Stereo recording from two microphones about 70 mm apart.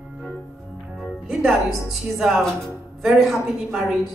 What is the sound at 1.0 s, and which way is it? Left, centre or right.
Music, centre.